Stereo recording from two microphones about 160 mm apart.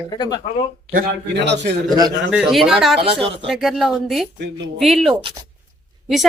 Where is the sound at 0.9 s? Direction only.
85° right.